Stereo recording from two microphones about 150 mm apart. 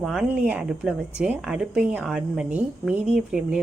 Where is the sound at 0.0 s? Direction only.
Centre (ahead or behind).